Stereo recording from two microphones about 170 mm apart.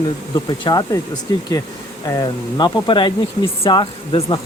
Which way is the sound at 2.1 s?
25° left (ahead or behind).